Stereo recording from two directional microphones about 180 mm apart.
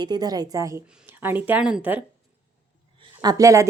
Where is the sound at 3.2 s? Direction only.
20° right (ahead or behind).